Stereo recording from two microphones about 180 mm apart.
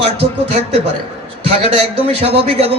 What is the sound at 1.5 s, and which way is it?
A man's voice, 30° right (ahead or behind).